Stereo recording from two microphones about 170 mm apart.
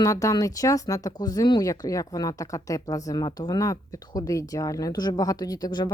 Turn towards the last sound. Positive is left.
turn(degrees=25)  # may be behind; listen again after turning